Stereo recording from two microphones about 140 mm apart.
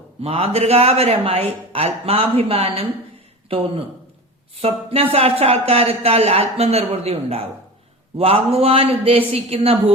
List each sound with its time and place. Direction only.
0.2 s speech: 45° right (ahead or behind)